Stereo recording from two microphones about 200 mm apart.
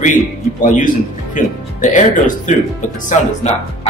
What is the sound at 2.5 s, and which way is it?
Speech, 40° left (ahead or behind).